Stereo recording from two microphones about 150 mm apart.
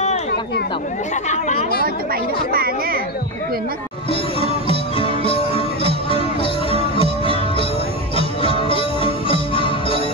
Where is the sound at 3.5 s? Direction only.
80° right.